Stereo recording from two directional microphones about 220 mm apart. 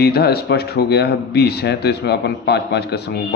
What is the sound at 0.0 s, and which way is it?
Mantra, 45° left (ahead or behind).